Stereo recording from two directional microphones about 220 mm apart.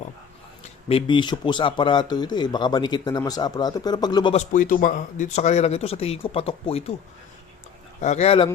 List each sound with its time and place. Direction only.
0.9 s speech: 25° left (ahead or behind)
4.5 s speech: 35° left (ahead or behind)
8.0 s speech: 30° left (ahead or behind)